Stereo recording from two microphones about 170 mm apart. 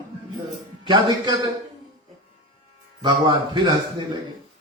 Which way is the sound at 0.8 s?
30° right (ahead or behind).